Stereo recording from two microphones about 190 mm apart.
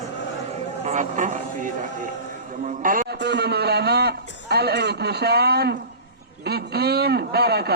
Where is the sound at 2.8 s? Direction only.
45° right (ahead or behind).